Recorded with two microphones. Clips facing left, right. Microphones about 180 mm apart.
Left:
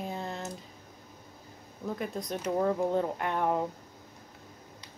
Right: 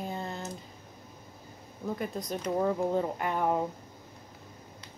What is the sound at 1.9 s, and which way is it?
Speech, centre (ahead or behind).